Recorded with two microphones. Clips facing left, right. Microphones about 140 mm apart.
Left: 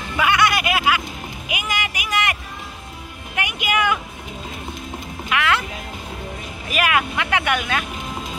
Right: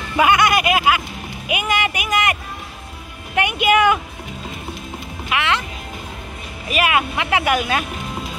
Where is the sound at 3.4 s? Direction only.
30° right (ahead or behind).